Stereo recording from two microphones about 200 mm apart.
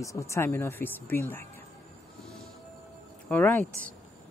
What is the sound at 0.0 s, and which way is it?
Speech, 15° left (ahead or behind).